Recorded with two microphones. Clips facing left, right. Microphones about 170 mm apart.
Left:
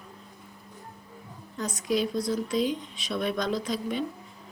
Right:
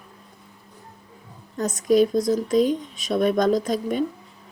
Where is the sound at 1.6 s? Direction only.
45° right (ahead or behind).